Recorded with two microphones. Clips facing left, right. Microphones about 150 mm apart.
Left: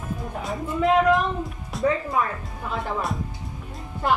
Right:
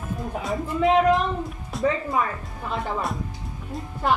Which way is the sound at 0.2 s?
Centre (ahead or behind).